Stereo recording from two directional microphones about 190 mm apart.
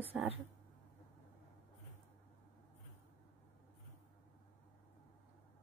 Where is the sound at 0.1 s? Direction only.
5° right (ahead or behind).